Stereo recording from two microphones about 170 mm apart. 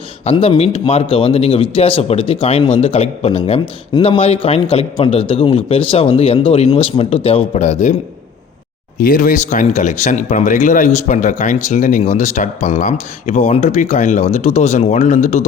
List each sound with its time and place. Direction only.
0.3 s speech: 35° left (ahead or behind)
9.0 s speech: 55° left (ahead or behind)